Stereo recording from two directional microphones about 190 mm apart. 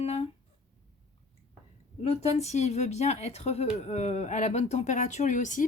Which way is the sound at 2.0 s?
30° left (ahead or behind).